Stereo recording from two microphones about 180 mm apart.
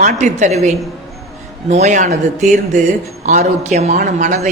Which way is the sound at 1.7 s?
40° right (ahead or behind).